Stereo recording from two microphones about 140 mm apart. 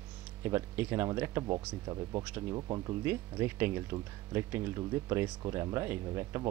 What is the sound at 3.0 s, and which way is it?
Speech, 15° right (ahead or behind).